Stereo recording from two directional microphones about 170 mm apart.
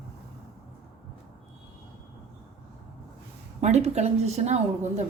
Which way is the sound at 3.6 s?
40° right (ahead or behind).